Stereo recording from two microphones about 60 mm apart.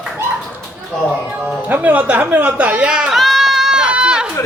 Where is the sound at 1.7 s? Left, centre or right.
Right.